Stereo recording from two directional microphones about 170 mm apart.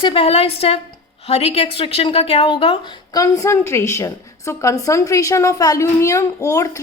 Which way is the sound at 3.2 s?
15° left (ahead or behind).